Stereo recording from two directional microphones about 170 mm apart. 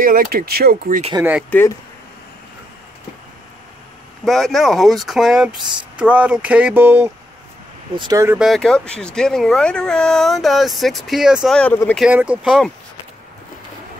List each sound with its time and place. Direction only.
0.0 s speech: 55° right (ahead or behind)
4.2 s speech: centre (ahead or behind); by 8.4 s 20° right (ahead or behind)
8.4 s speech: centre (ahead or behind)
12.0 s speech: 10° right (ahead or behind)